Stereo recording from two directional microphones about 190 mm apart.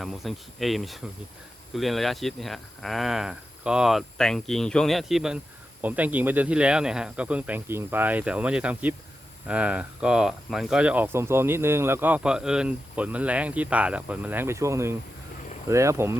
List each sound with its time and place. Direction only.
0.0 s speech: centre (ahead or behind)